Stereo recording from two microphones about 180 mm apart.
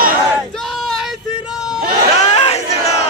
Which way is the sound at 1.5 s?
5° right (ahead or behind).